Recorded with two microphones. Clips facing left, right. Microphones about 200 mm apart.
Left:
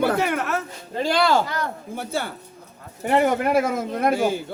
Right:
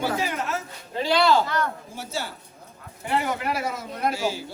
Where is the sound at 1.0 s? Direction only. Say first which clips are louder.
Left 1 dB; 50° left (ahead or behind).